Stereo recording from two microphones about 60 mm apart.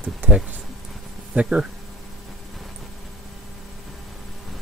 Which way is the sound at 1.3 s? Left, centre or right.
Centre.